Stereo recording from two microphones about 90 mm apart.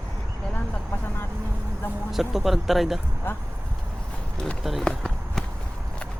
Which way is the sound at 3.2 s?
25° left (ahead or behind).